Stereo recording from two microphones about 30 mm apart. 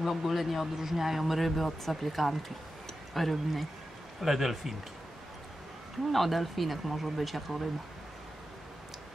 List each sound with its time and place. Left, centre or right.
0.0 s speech: centre
6.1 s speech: centre